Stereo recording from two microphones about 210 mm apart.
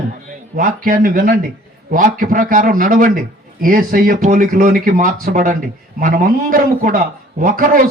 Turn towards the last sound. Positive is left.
turn(degrees=-40)  # may be behind; listen again after turning